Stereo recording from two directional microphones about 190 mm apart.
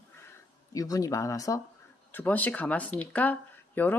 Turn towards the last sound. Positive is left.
turn(degrees=10)  # may be behind; listen again after turning